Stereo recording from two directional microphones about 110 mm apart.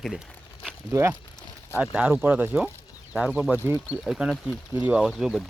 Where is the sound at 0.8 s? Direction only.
25° right (ahead or behind).